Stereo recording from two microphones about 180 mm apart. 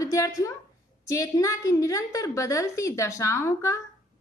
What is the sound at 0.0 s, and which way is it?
A woman's voice, 20° left (ahead or behind).